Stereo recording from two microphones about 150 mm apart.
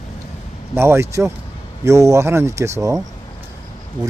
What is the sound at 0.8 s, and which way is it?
Speech, 15° right (ahead or behind).